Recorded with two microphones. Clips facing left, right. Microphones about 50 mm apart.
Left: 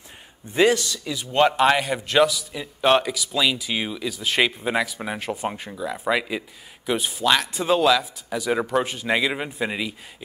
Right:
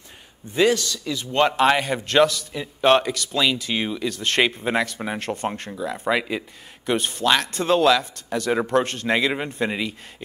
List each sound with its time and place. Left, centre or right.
0.5 s a man's voice: left
1.3 s speech: centre
4.4 s speech: centre